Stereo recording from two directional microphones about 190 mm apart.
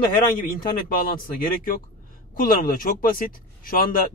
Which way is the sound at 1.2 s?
45° left (ahead or behind).